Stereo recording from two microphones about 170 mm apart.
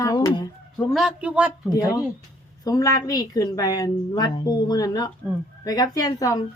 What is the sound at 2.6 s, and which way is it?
A woman's voice, 20° left (ahead or behind).